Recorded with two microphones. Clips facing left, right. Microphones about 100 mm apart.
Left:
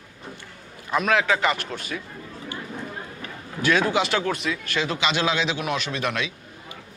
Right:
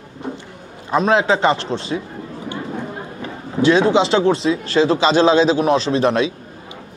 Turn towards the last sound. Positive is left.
turn(degrees=-30)  # may be behind; listen again after turning